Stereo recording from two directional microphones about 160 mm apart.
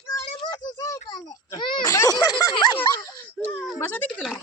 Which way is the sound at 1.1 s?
25° left (ahead or behind).